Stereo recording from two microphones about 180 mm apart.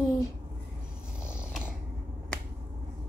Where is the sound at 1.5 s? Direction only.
5° right (ahead or behind).